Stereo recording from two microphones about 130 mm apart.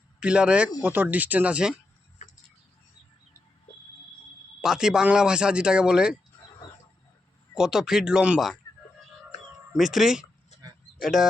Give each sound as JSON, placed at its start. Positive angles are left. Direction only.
{"t": 0.2, "sound": "speech", "side_deg": -10}
{"t": 2.2, "sound": "a sound", "side_deg": 70}
{"t": 4.6, "sound": "speech", "side_deg": -5}
{"t": 7.5, "sound": "speech", "side_deg": -5}
{"t": 9.7, "sound": "speech", "side_deg": 0}
{"t": 10.5, "sound": "a sound", "side_deg": 55}
{"t": 11.0, "sound": "speech", "side_deg": -5}